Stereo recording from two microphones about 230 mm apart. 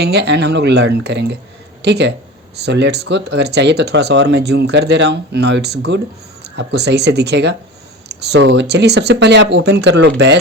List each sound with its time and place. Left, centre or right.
0.0 s speech: right